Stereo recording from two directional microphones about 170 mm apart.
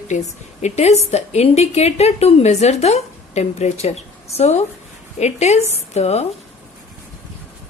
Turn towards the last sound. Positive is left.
turn(degrees=40)  # may be behind; listen again after turning